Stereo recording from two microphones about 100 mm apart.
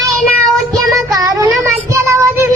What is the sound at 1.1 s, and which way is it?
Child singing, 35° right (ahead or behind).